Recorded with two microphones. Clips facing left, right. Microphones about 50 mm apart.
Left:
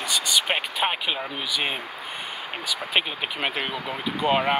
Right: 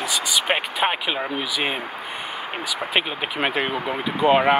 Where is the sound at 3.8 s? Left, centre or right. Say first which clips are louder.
Right 5 dB; centre.